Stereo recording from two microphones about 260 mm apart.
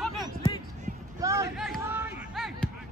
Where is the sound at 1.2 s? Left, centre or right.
Centre.